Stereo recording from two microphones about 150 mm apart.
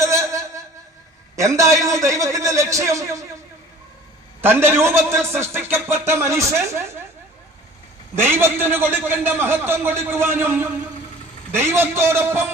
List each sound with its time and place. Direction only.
0.0 s a sound: 20° right (ahead or behind)
1.4 s a man's voice: 20° right (ahead or behind)
4.4 s a man's voice: 15° right (ahead or behind)
8.1 s a man's voice: 15° right (ahead or behind)